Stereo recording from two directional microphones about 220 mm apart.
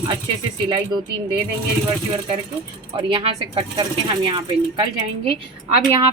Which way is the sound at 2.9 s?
25° right (ahead or behind).